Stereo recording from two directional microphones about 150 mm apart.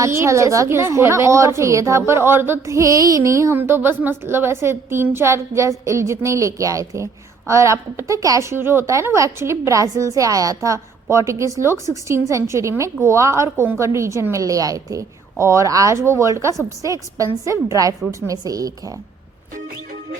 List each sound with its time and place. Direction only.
0.0 s a woman's voice: 20° right (ahead or behind)